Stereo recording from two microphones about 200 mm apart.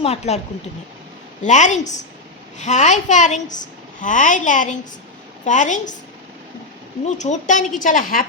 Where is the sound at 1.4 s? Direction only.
35° left (ahead or behind).